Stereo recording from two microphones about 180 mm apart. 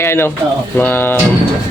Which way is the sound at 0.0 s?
15° left (ahead or behind).